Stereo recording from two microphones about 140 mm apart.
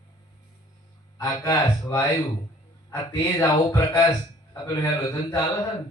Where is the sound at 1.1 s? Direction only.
25° left (ahead or behind).